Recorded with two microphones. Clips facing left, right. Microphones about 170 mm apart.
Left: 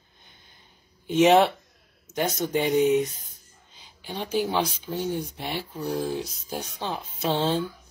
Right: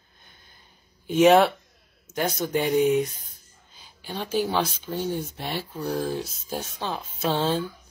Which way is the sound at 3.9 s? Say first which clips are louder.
Even; 15° left (ahead or behind).